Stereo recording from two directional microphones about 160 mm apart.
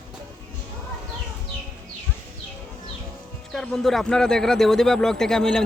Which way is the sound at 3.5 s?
Centre (ahead or behind).